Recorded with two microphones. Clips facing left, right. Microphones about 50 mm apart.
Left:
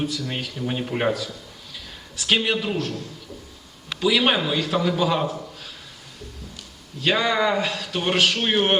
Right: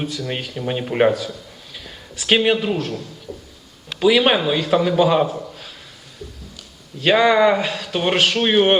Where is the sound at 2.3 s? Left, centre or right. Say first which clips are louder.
Right 5 dB; centre.